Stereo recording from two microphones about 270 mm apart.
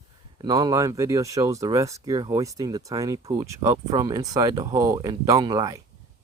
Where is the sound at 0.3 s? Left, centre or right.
Centre.